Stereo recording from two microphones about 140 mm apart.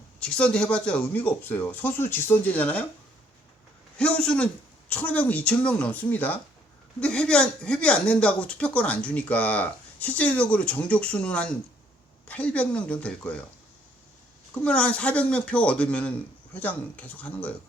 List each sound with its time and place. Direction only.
0.2 s speech: 5° left (ahead or behind)
3.9 s speech: 10° left (ahead or behind)
14.5 s speech: 10° left (ahead or behind)